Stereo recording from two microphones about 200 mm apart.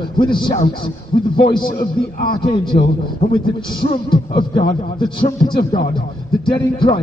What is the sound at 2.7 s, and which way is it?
A man's voice, 35° left (ahead or behind).